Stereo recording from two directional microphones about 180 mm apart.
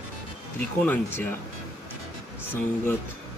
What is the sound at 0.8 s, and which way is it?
Speech, 10° left (ahead or behind).